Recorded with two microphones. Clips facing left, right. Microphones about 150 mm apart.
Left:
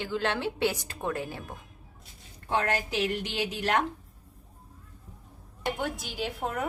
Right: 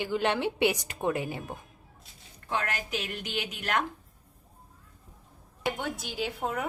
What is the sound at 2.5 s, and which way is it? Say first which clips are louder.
A woman's voice: left 4 dB; 35° left (ahead or behind).